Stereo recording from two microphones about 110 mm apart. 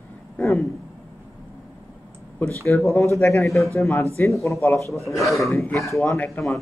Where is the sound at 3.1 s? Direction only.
25° left (ahead or behind).